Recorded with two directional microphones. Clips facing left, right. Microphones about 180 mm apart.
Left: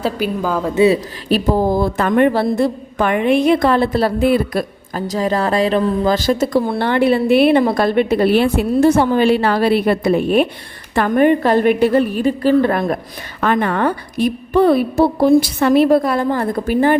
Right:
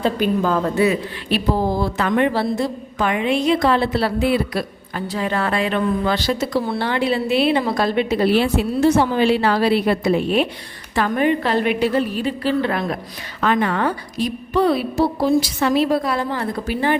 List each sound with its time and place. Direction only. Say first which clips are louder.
0.0 s a woman's voice: right 1 dB; 10° left (ahead or behind)
1.3 s a woman's voice: left 5 dB; 50° left (ahead or behind)